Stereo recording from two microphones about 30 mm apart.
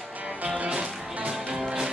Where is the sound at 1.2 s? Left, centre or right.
Centre.